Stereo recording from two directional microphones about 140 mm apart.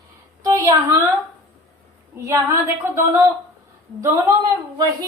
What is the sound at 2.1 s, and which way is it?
A woman's voice, 20° right (ahead or behind).